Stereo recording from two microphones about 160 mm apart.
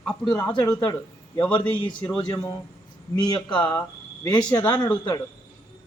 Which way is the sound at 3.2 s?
25° left (ahead or behind).